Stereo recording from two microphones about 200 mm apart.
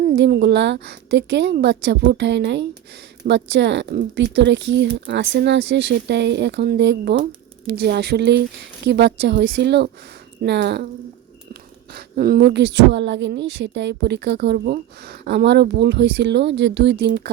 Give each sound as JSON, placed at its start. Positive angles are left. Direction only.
{"t": 0.0, "sound": "a woman's voice", "side_deg": -50}
{"t": 11.9, "sound": "a woman's voice", "side_deg": -50}